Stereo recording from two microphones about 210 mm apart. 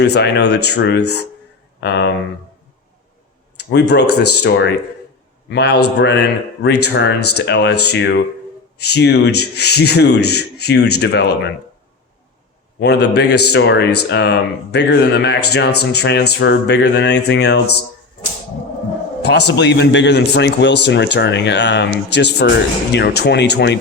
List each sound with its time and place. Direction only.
0.0 s speech: 55° left (ahead or behind)
3.6 s a man's voice: 50° left (ahead or behind); by 7.3 s 75° left (ahead or behind)
7.3 s speech: 55° left (ahead or behind)
12.8 s speech: 55° left (ahead or behind)
19.2 s a man's voice: 50° left (ahead or behind)